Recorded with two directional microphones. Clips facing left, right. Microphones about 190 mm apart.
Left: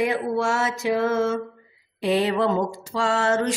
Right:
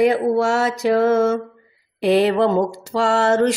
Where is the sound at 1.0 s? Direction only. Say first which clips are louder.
Right 6 dB; 50° right (ahead or behind).